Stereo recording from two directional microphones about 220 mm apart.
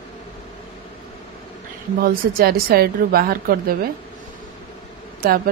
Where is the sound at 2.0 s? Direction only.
45° right (ahead or behind).